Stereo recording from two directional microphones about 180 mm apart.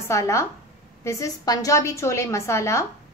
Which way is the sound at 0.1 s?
15° left (ahead or behind).